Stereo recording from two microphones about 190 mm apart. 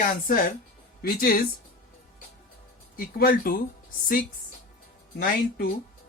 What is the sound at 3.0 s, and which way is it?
Speech, 50° left (ahead or behind).